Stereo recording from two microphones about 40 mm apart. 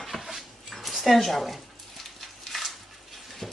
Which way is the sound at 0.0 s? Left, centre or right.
Centre.